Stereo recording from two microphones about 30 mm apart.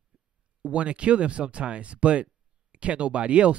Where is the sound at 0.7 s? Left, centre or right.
Right.